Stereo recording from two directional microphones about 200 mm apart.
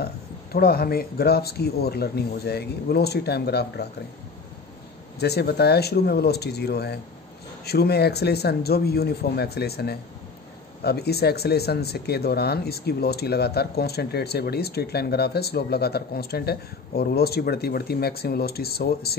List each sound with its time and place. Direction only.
0.0 s speech: 50° left (ahead or behind)
5.2 s speech: 55° left (ahead or behind)